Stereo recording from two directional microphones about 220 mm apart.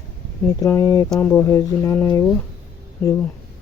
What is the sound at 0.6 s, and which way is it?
Speech, 15° left (ahead or behind).